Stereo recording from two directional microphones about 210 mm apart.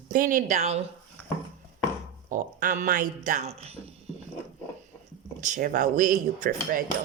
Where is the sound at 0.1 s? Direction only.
40° right (ahead or behind).